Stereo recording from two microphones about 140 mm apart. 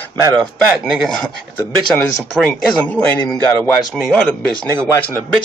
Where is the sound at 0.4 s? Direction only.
Centre (ahead or behind).